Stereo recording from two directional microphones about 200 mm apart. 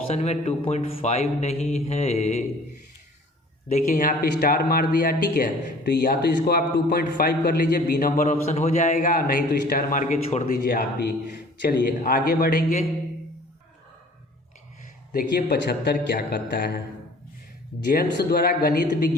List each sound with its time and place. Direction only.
0.1 s a man's voice: 35° left (ahead or behind)
3.7 s speech: 40° left (ahead or behind)
11.6 s speech: 50° left (ahead or behind)
15.1 s speech: 45° left (ahead or behind)
17.9 s speech: 50° left (ahead or behind)